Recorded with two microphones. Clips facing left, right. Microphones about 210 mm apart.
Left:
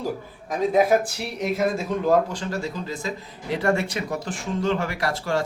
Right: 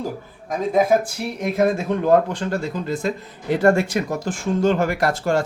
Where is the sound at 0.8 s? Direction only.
55° right (ahead or behind).